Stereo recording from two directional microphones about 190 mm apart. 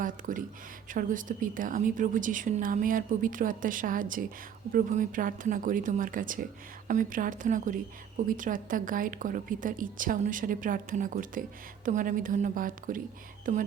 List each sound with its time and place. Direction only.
0.0 s a woman's voice: 45° right (ahead or behind)